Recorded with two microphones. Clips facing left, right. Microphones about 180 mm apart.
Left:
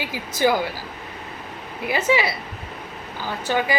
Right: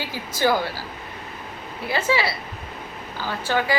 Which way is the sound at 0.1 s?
15° left (ahead or behind).